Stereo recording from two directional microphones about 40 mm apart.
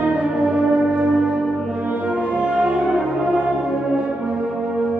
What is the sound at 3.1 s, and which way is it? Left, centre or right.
French horn, right.